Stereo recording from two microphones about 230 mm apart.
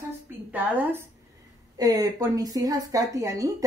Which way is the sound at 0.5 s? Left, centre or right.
Centre.